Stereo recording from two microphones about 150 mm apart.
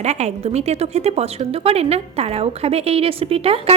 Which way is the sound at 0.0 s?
45° right (ahead or behind).